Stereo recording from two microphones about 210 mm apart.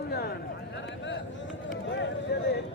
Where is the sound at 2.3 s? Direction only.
50° left (ahead or behind).